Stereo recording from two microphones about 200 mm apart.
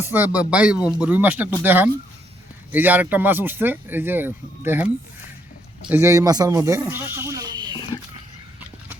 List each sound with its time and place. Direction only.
0.0 s speech: 10° right (ahead or behind)
5.9 s speech: 15° right (ahead or behind)
7.2 s a sound: 15° right (ahead or behind)